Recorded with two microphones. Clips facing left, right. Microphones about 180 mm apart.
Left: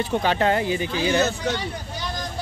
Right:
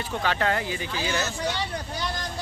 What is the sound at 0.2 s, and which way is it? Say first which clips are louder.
Speech: left 1 dB; 20° left (ahead or behind).